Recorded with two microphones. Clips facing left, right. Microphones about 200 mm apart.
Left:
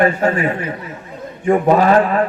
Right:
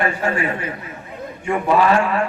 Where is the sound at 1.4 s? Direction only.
35° left (ahead or behind).